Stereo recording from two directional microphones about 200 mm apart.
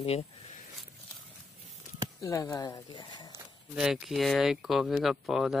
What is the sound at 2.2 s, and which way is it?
Speech, 15° left (ahead or behind).